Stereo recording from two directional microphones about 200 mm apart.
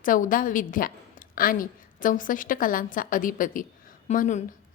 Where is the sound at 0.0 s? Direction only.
40° left (ahead or behind).